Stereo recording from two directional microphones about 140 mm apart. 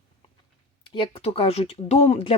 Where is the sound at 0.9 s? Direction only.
40° left (ahead or behind).